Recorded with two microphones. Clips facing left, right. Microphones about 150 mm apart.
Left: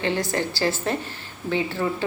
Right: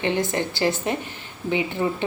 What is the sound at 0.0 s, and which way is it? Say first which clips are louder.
Speech: right 1 dB; 20° right (ahead or behind).